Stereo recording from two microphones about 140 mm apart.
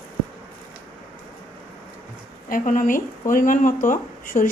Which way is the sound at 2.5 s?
70° left (ahead or behind).